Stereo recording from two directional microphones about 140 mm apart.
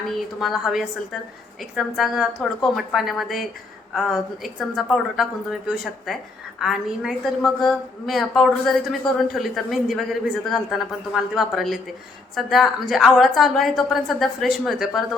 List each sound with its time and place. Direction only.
0.1 s a woman's voice: centre (ahead or behind)